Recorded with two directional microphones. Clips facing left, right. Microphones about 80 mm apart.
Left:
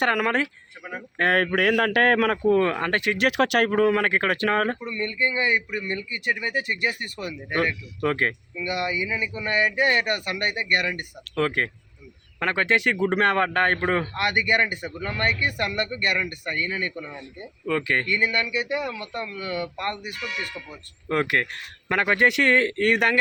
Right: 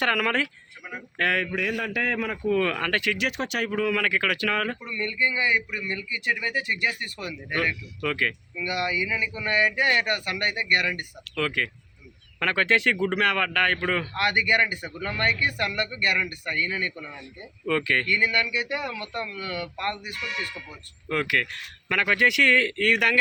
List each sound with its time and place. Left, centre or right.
0.0 s speech: left
1.4 s a man's voice: left
2.5 s speech: left
3.2 s speech: left
8.5 s speech: left
12.4 s speech: left
13.1 s speech: left